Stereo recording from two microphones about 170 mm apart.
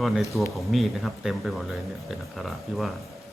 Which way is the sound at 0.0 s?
Centre (ahead or behind).